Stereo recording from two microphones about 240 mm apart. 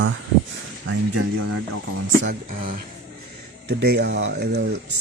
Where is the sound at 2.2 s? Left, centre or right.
Right.